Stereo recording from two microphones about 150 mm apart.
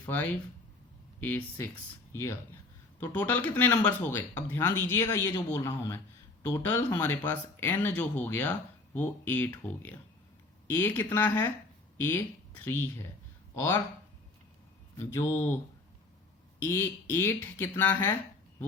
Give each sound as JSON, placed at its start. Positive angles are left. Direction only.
{"t": 0.1, "sound": "speech", "side_deg": 10}
{"t": 3.0, "sound": "speech", "side_deg": 10}
{"t": 10.7, "sound": "speech", "side_deg": 15}
{"t": 14.9, "sound": "speech", "side_deg": 20}
{"t": 16.6, "sound": "speech", "side_deg": 15}